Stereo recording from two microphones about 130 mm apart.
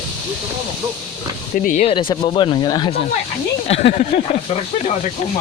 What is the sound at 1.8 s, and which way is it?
Speech, 40° left (ahead or behind).